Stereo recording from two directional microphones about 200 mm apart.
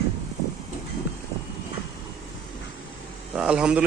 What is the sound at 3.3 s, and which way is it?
Speech, 5° right (ahead or behind).